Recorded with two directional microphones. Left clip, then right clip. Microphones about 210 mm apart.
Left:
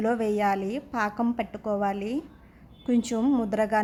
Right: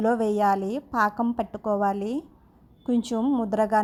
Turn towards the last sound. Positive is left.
turn(degrees=-15)  # may be behind; listen again after turning